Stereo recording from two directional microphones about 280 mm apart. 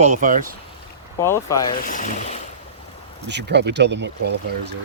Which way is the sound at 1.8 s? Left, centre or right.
Left.